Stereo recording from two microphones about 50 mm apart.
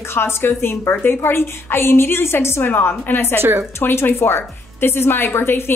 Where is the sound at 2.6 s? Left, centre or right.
Left.